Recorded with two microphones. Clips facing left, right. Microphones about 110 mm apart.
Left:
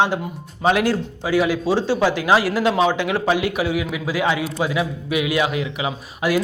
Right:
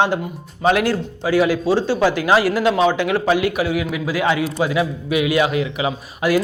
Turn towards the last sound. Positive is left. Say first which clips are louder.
# right 2 dB
turn(degrees=5)  # may be behind; listen again after turning